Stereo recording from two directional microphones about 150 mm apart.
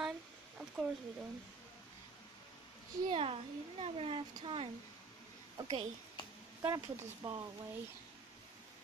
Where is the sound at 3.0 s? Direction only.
35° right (ahead or behind).